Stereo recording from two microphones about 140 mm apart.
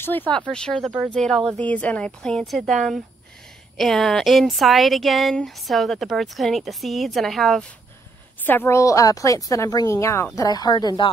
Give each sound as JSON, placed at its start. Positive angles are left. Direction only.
{"t": 0.5, "sound": "speech", "side_deg": 5}
{"t": 8.5, "sound": "a woman's voice", "side_deg": 15}